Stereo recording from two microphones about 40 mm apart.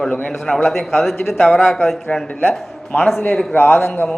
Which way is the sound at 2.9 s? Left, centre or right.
Left.